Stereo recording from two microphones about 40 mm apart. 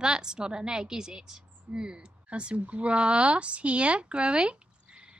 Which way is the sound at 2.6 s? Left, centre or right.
Right.